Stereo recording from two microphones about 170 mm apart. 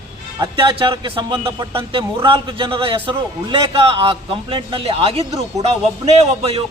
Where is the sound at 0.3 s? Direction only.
25° right (ahead or behind).